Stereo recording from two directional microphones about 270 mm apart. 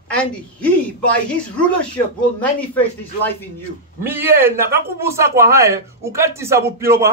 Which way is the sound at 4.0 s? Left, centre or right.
Centre.